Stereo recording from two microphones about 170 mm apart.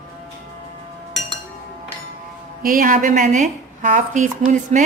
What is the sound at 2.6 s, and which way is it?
A woman's voice, 55° right (ahead or behind).